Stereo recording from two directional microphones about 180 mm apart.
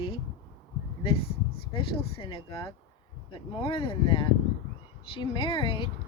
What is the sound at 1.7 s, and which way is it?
Speech, 30° left (ahead or behind).